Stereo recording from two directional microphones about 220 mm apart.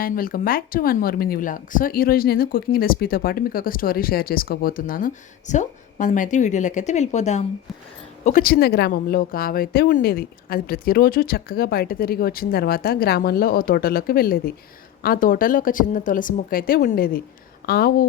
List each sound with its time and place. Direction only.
0.0 s speech: 40° left (ahead or behind)